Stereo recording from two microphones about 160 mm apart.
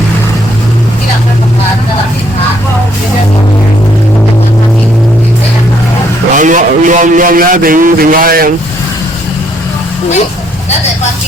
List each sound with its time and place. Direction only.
6.3 s a man's voice: 55° right (ahead or behind)